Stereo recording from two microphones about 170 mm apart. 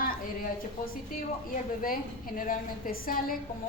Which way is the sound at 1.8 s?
55° left (ahead or behind).